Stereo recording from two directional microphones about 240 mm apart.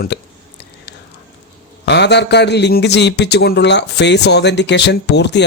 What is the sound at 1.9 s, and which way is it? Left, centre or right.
A man's voice, left.